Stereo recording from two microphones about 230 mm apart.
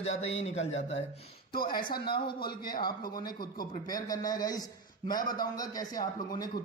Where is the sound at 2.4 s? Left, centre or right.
Left.